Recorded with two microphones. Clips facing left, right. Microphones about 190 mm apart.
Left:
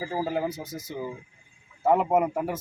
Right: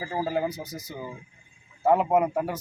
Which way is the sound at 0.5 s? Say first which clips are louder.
Left 1 dB; 25° left (ahead or behind).